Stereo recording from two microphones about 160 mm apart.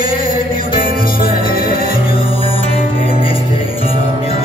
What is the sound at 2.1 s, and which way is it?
Music, 35° left (ahead or behind).